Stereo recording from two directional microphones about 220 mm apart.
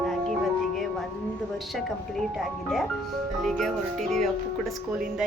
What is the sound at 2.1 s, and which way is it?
A woman's voice, centre (ahead or behind).